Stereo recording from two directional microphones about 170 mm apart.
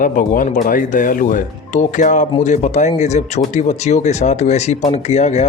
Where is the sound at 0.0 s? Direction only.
55° left (ahead or behind).